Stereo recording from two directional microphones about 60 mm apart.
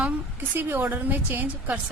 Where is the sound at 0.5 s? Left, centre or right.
Right.